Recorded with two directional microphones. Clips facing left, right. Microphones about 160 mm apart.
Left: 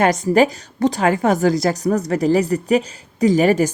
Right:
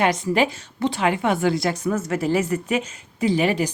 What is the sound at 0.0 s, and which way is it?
A woman's voice, 40° left (ahead or behind).